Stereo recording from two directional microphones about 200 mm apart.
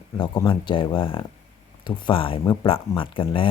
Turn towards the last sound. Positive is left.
turn(degrees=25)  # may be behind; listen again after turning